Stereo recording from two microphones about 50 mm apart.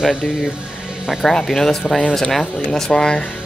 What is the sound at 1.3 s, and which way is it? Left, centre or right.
Speech, centre.